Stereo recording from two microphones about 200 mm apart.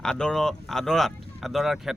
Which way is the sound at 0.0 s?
5° left (ahead or behind).